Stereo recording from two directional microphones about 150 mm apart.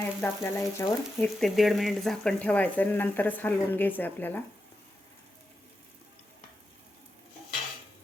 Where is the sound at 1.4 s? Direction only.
Centre (ahead or behind).